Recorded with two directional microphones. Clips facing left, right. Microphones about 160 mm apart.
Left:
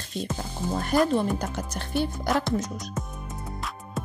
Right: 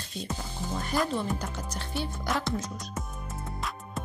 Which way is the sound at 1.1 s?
50° left (ahead or behind).